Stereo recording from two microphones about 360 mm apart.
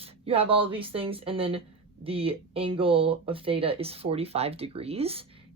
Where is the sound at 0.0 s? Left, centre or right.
Centre.